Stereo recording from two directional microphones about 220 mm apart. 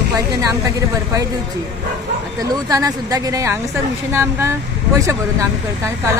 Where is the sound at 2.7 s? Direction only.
15° right (ahead or behind).